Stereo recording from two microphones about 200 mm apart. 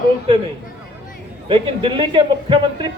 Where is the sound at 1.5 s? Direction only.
25° right (ahead or behind).